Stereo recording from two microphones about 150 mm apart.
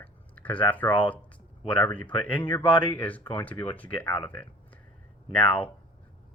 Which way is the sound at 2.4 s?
30° left (ahead or behind).